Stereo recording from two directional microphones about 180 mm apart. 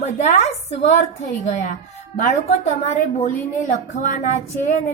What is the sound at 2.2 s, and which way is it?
A woman's voice, 40° left (ahead or behind).